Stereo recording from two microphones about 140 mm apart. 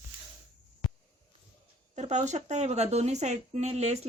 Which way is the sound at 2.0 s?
55° right (ahead or behind).